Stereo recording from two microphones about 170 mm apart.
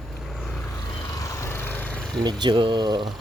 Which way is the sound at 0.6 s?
20° left (ahead or behind).